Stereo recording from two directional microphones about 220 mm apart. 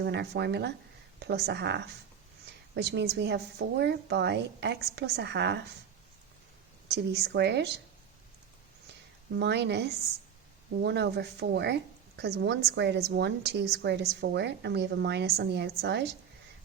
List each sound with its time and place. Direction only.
0.0 s a woman's voice: 50° right (ahead or behind)
6.8 s a woman's voice: 50° right (ahead or behind)
9.3 s a woman's voice: 50° right (ahead or behind)